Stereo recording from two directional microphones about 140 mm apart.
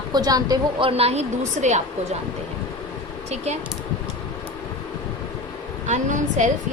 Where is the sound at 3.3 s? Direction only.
50° right (ahead or behind).